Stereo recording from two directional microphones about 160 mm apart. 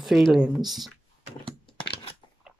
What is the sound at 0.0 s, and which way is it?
Speech, centre (ahead or behind).